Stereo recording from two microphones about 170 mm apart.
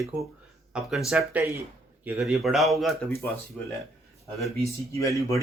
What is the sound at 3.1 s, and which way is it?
Speech, 15° left (ahead or behind).